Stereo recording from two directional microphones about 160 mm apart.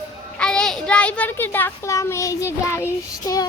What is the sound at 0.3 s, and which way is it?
A child's voice, 5° left (ahead or behind).